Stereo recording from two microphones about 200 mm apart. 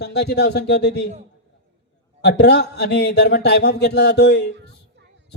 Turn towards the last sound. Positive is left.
turn(degrees=55)  # may be behind; listen again after turning